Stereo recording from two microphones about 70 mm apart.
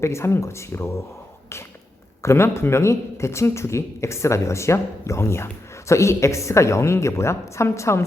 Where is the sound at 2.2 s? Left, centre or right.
Left.